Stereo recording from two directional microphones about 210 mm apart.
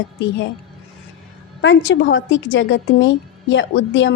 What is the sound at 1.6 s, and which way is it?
A woman's voice, 60° left (ahead or behind).